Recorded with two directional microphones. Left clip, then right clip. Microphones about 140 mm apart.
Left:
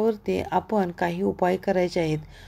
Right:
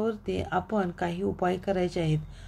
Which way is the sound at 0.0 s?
40° left (ahead or behind).